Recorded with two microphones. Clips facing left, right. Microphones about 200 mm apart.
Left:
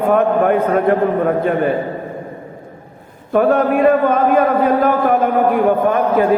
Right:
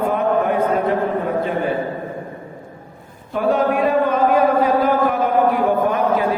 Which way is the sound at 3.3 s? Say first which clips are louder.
Left 4 dB; 55° left (ahead or behind).